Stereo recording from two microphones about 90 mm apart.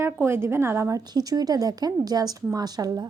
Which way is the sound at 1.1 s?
45° right (ahead or behind).